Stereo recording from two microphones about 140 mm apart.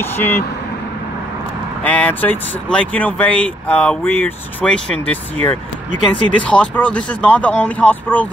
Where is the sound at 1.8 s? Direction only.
10° left (ahead or behind).